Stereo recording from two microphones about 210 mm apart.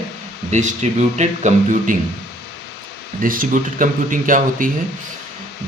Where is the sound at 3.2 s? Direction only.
40° right (ahead or behind).